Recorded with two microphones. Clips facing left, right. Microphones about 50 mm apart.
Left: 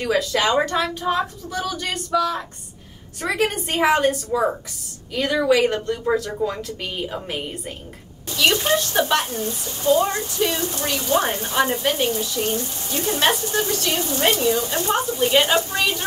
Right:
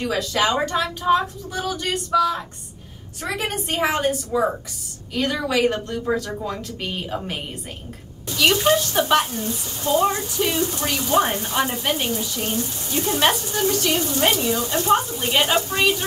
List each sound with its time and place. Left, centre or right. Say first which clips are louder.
0.0 s speech: left 1 dB; centre